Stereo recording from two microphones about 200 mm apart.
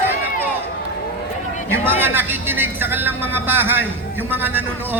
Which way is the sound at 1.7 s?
10° right (ahead or behind).